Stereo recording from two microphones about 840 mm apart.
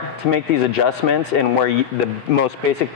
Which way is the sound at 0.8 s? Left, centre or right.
Left.